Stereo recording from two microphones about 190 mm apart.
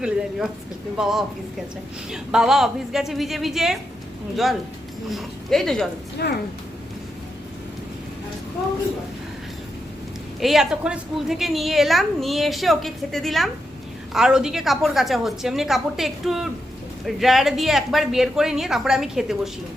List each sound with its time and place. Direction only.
0.0 s a woman's voice: 5° right (ahead or behind)
5.0 s a woman's voice: centre (ahead or behind)
6.2 s speech: 55° left (ahead or behind)
10.4 s a woman's voice: centre (ahead or behind)